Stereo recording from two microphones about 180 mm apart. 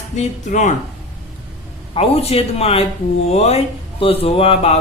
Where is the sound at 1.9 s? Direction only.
35° left (ahead or behind).